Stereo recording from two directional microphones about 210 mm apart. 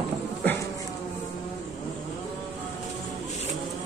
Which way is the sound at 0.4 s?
10° left (ahead or behind).